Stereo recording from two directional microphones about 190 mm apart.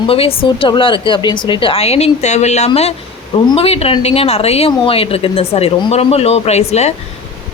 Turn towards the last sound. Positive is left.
turn(degrees=35)  # may be behind; listen again after turning